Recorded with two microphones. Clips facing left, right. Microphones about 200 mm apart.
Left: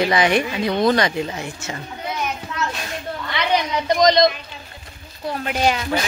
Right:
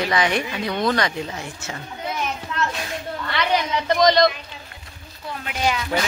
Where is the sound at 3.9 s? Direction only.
15° left (ahead or behind).